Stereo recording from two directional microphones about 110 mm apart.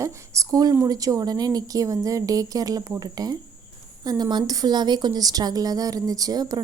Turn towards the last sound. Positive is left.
turn(degrees=-35)  # may be behind; listen again after turning